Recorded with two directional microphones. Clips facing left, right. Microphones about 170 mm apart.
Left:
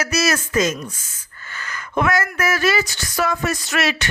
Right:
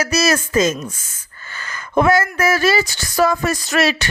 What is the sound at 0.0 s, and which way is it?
A woman's voice, 30° right (ahead or behind).